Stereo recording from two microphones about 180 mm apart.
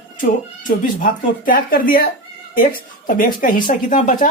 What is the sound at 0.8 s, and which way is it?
Speech, 50° left (ahead or behind).